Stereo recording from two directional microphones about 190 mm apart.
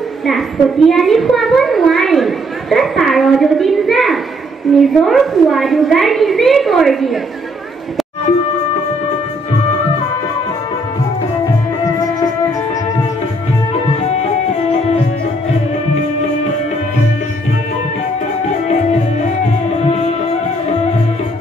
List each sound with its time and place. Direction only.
0.3 s a child's voice: centre (ahead or behind)
14.0 s music: 35° left (ahead or behind)
19.7 s music: 35° left (ahead or behind)